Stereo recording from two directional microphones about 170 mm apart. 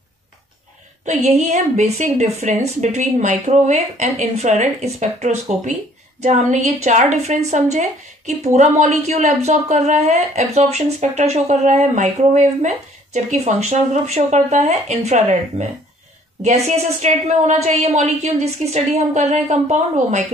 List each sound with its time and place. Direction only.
1.5 s a woman's voice: 45° right (ahead or behind)